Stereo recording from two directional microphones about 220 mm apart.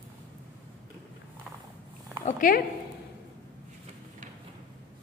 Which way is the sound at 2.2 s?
35° left (ahead or behind).